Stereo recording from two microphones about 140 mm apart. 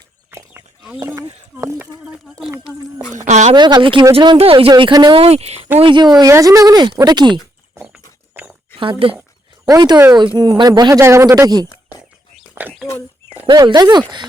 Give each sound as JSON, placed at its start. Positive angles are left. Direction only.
{"t": 0.3, "sound": "a sound", "side_deg": -15}
{"t": 0.9, "sound": "speech", "side_deg": -25}
{"t": 3.2, "sound": "speech", "side_deg": -55}
{"t": 3.5, "sound": "speech", "side_deg": -30}
{"t": 4.7, "sound": "speech", "side_deg": -30}
{"t": 5.2, "sound": "speech", "side_deg": -50}
{"t": 5.8, "sound": "speech", "side_deg": -30}
{"t": 7.9, "sound": "a sound", "side_deg": -5}
{"t": 8.8, "sound": "speech", "side_deg": -40}
{"t": 9.6, "sound": "speech", "side_deg": -30}
{"t": 12.6, "sound": "bird", "side_deg": -15}
{"t": 13.5, "sound": "speech", "side_deg": -30}